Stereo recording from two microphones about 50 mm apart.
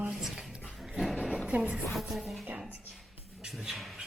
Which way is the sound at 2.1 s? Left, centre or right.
Centre.